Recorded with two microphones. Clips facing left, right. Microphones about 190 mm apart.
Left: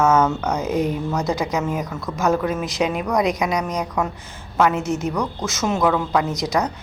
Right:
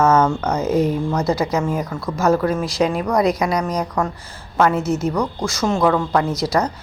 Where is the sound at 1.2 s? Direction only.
15° left (ahead or behind).